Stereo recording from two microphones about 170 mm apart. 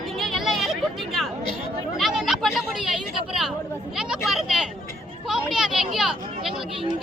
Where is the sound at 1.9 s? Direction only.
Centre (ahead or behind).